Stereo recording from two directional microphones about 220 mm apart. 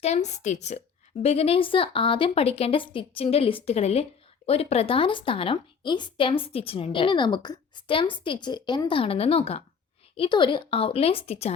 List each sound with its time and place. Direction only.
0.0 s a woman's voice: 30° left (ahead or behind)